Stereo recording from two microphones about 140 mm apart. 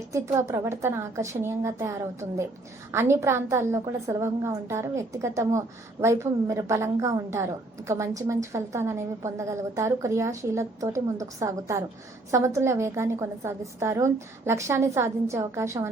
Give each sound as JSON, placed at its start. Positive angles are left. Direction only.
{"t": 0.1, "sound": "a woman's voice", "side_deg": -20}